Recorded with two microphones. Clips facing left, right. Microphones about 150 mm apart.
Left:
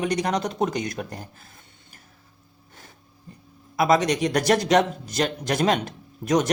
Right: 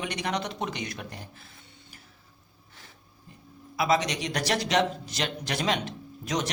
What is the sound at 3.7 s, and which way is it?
A man's voice, 50° left (ahead or behind).